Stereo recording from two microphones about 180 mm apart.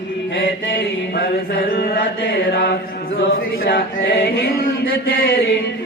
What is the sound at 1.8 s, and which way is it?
Mantra, 65° left (ahead or behind).